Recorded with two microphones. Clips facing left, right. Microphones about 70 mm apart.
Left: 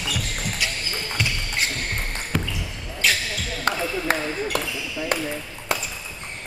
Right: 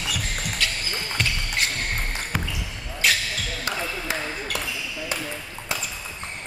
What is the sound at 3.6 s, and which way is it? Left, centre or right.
Ping, left.